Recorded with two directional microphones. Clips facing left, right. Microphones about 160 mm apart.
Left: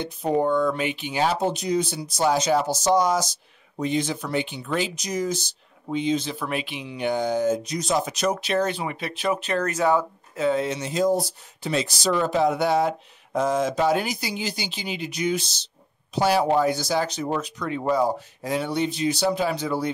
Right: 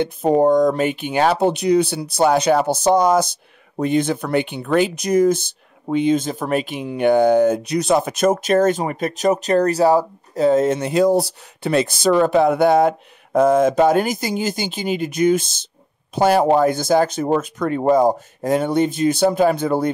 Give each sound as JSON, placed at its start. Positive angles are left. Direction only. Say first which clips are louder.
{"t": 0.0, "sound": "speech", "louder": "right 7 dB", "side_deg": -45}